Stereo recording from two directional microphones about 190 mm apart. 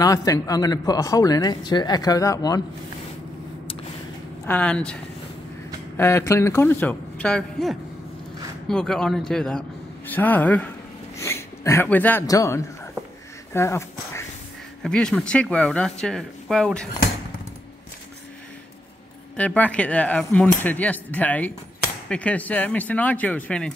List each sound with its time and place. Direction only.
0.0 s speech: 20° left (ahead or behind)
4.5 s speech: 5° left (ahead or behind)
5.9 s speech: 15° left (ahead or behind)
13.5 s a sound: 15° left (ahead or behind)
14.8 s speech: 5° left (ahead or behind)
19.3 s speech: 10° left (ahead or behind)